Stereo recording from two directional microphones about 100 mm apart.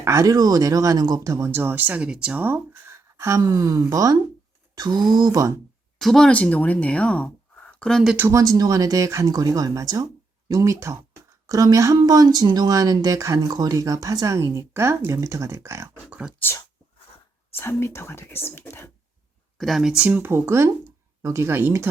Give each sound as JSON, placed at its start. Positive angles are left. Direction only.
{"t": 0.0, "sound": "speech", "side_deg": -30}
{"t": 1.5, "sound": "speech", "side_deg": -20}
{"t": 6.0, "sound": "speech", "side_deg": 5}
{"t": 8.3, "sound": "speech", "side_deg": -35}
{"t": 16.0, "sound": "speech", "side_deg": -15}
{"t": 17.6, "sound": "speech", "side_deg": 25}
{"t": 19.5, "sound": "speech", "side_deg": 0}